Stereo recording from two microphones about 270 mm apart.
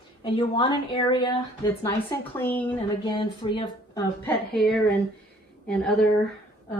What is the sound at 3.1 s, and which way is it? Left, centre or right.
Speech, centre.